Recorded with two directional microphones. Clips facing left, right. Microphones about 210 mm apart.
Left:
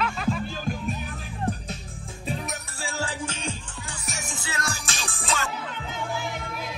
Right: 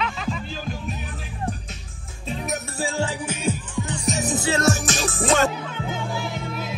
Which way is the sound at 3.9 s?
30° right (ahead or behind).